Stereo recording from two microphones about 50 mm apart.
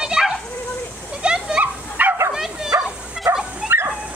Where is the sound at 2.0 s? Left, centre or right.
Right.